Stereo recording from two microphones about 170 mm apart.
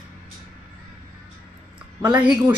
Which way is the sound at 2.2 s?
10° right (ahead or behind).